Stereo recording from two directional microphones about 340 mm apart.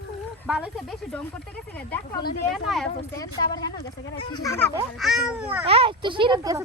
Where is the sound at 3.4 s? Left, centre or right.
Centre.